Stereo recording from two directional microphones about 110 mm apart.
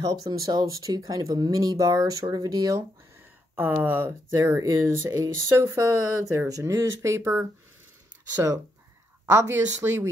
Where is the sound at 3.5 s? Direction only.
20° right (ahead or behind).